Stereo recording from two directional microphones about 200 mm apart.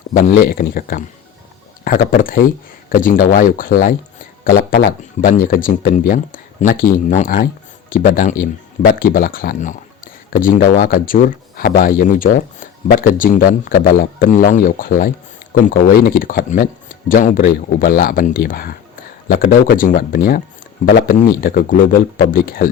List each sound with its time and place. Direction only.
0.1 s speech: 45° left (ahead or behind)